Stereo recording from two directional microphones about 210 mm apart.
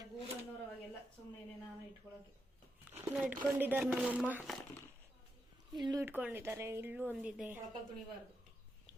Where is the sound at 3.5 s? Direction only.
10° right (ahead or behind).